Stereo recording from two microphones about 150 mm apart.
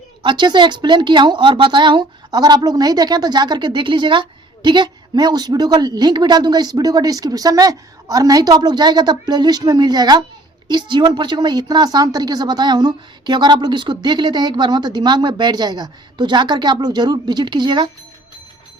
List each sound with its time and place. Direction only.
0.2 s a woman's voice: 30° right (ahead or behind)